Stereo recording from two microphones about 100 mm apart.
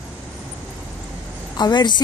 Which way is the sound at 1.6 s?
45° left (ahead or behind).